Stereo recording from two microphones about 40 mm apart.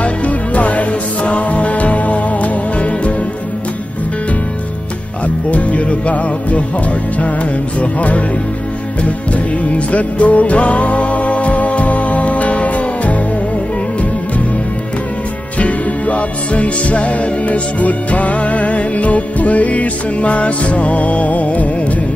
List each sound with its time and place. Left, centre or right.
0.0 s music: left
5.5 s music: left
7.8 s music: left
15.6 s music: left